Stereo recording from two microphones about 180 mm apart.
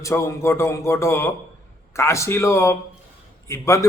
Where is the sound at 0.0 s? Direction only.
15° left (ahead or behind).